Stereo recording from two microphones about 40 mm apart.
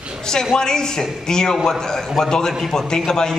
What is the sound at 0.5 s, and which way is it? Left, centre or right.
A man's voice, centre.